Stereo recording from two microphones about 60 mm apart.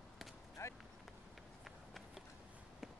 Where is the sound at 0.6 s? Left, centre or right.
Left.